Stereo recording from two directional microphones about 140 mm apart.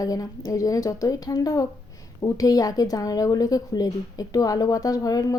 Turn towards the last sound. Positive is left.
turn(degrees=25)  # may be behind; listen again after turning